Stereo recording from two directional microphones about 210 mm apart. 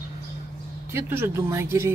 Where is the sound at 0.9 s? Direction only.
10° right (ahead or behind).